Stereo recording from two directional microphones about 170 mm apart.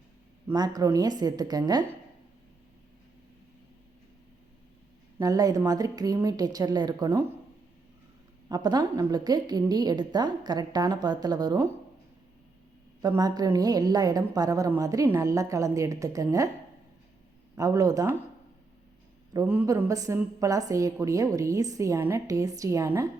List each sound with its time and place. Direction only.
0.5 s a woman's voice: 25° right (ahead or behind)
5.2 s a woman's voice: 20° right (ahead or behind)
8.4 s a woman's voice: 25° right (ahead or behind)
13.0 s a woman's voice: 20° right (ahead or behind)
17.5 s a woman's voice: 20° right (ahead or behind)
19.3 s a woman's voice: 15° right (ahead or behind)